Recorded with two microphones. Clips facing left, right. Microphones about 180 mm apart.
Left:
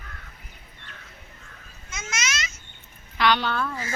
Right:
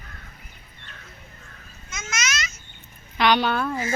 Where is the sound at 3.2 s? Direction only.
15° right (ahead or behind).